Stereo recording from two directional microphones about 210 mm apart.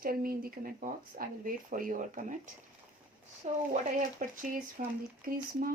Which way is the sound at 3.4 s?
30° right (ahead or behind).